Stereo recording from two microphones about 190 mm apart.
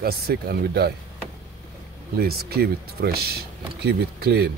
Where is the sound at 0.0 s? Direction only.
55° right (ahead or behind).